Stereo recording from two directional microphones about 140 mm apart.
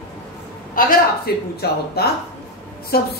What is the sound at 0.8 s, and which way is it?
Speech, 85° left.